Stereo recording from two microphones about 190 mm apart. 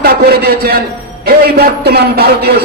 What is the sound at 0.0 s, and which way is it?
A man's voice, 55° right (ahead or behind).